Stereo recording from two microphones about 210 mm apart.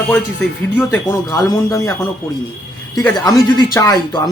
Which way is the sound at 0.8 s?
15° left (ahead or behind).